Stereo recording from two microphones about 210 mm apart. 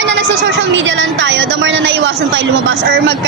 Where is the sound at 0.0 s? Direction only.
60° right (ahead or behind).